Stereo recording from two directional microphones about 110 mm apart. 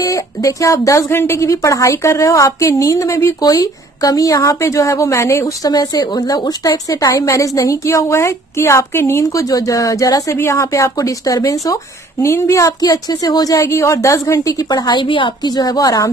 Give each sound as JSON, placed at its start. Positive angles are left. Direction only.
{"t": 0.0, "sound": "speech", "side_deg": 30}
{"t": 5.7, "sound": "a woman's voice", "side_deg": 35}